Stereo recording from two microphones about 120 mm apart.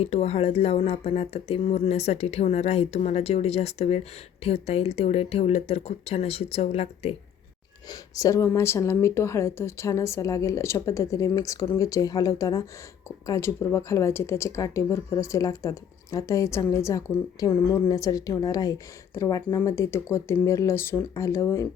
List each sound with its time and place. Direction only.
0.0 s speech: 60° left (ahead or behind)
7.9 s a woman's voice: 30° left (ahead or behind)